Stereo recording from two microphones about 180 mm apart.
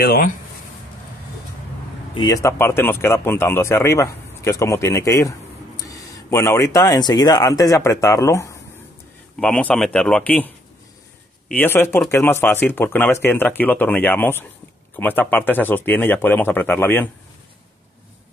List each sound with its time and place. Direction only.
0.0 s speech: 55° left (ahead or behind)
2.1 s speech: 20° left (ahead or behind)